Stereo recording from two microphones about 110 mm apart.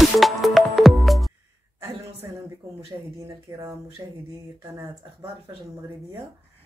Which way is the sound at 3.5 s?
30° right (ahead or behind).